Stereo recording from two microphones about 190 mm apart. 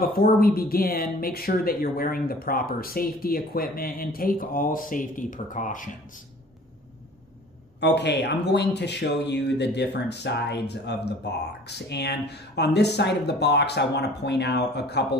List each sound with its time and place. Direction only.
0.0 s speech: 50° left (ahead or behind)
7.8 s speech: 60° left (ahead or behind)